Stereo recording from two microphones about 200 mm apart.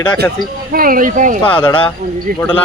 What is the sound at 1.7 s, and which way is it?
Speech, 25° left (ahead or behind).